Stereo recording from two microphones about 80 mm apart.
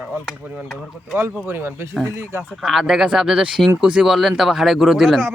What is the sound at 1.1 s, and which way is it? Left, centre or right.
Speech, right.